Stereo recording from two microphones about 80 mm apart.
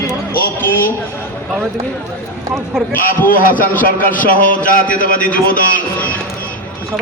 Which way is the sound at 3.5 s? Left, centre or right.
Left.